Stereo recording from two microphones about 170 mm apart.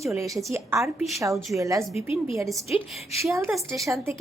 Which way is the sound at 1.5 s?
20° right (ahead or behind).